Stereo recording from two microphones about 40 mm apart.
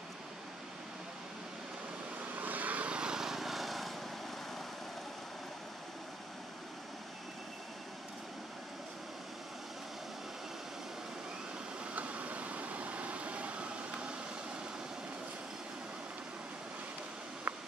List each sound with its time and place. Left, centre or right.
2.3 s vehicle: right
3.0 s vehicle: centre
11.9 s vehicle: right
17.5 s a sound: right